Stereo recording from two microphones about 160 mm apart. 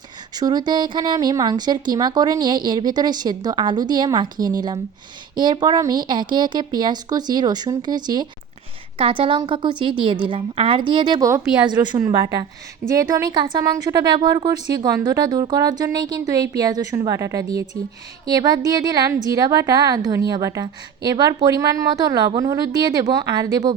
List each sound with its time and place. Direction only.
0.3 s a woman's voice: 25° right (ahead or behind)